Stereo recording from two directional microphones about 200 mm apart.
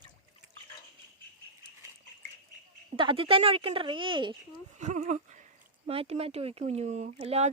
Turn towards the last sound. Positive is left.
turn(degrees=-30)  # may be behind; listen again after turning